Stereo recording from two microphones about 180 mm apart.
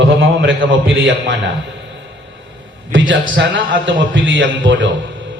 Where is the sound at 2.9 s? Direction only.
90° right.